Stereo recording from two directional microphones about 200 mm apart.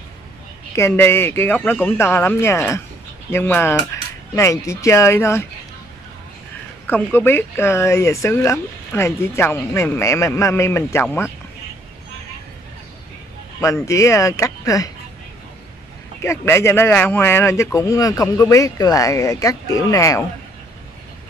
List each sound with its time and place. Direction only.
0.7 s speech: 10° left (ahead or behind)
6.9 s speech: 10° left (ahead or behind)
13.8 s speech: 15° left (ahead or behind)
16.2 s speech: 15° left (ahead or behind)